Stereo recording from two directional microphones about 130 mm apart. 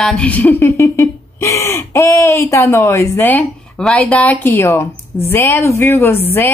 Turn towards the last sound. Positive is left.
turn(degrees=15)  # may be behind; listen again after turning